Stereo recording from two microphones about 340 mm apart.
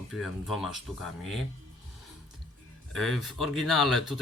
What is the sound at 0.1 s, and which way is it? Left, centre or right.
Speech, centre.